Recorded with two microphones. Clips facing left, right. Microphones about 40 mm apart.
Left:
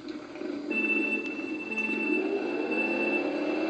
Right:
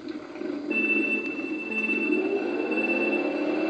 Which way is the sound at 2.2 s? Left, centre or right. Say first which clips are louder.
Right 3 dB; centre.